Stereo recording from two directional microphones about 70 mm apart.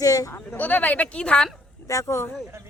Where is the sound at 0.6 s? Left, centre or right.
Left.